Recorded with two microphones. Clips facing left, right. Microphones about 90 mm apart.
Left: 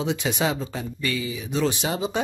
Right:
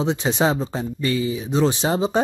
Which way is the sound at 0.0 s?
30° right (ahead or behind).